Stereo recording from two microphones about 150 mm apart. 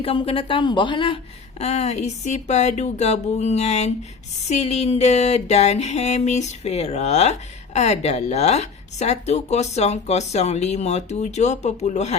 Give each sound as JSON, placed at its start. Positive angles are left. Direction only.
{"t": 0.0, "sound": "mantra", "side_deg": 40}